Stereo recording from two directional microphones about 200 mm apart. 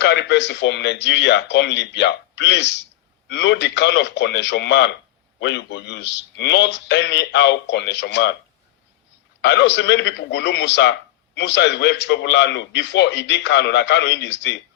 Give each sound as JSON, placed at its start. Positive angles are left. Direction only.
{"t": 0.0, "sound": "a man's voice", "side_deg": 60}
{"t": 9.4, "sound": "a man's voice", "side_deg": 60}